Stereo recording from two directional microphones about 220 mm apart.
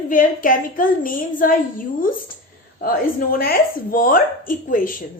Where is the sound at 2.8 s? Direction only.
40° left (ahead or behind).